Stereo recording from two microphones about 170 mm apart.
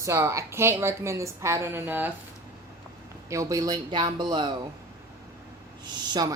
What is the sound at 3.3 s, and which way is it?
A woman's voice, 20° right (ahead or behind).